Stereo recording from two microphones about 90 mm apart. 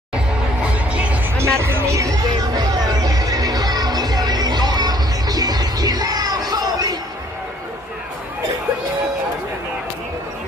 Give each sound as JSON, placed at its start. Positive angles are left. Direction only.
{"t": 0.1, "sound": "music", "side_deg": -15}
{"t": 1.4, "sound": "speech", "side_deg": -30}
{"t": 2.2, "sound": "music", "side_deg": -50}